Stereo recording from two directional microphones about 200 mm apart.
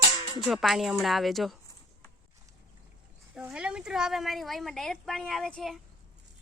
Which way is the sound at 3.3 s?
5° right (ahead or behind).